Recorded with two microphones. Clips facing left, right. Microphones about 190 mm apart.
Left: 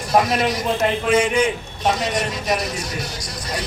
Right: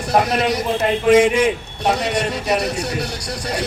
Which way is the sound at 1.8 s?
65° right (ahead or behind).